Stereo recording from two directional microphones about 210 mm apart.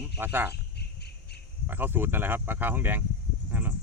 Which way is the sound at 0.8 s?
50° left (ahead or behind).